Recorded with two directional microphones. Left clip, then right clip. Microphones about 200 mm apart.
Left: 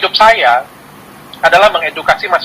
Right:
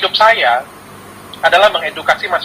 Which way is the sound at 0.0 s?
20° left (ahead or behind).